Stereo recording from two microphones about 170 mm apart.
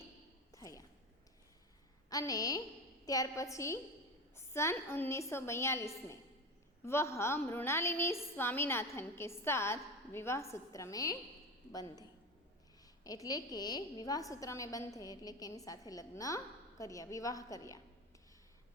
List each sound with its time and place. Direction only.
0.5 s a sound: 20° left (ahead or behind)
2.0 s a woman's voice: 20° left (ahead or behind)
13.1 s a woman's voice: 20° left (ahead or behind)